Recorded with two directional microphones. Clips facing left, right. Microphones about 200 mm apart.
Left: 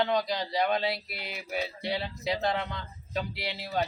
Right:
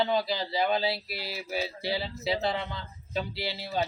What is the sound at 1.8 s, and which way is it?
Speech, 5° right (ahead or behind).